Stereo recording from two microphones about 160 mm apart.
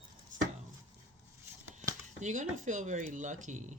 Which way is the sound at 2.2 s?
50° right (ahead or behind).